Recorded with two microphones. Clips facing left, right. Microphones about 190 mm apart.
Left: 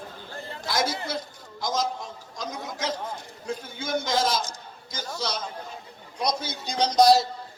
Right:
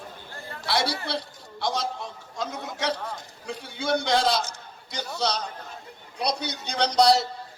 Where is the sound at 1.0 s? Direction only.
70° right (ahead or behind).